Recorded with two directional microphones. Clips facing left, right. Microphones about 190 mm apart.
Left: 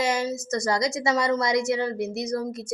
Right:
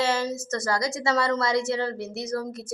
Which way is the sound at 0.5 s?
20° left (ahead or behind).